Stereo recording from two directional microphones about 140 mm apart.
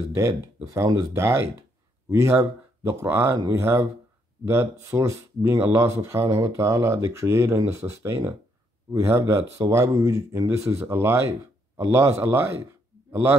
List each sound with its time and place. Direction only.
0.1 s a man's voice: 20° right (ahead or behind)